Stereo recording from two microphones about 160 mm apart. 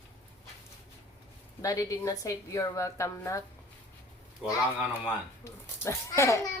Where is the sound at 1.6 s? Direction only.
20° left (ahead or behind).